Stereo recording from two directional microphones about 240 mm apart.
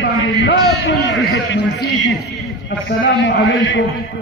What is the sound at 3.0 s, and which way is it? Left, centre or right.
Speech, left.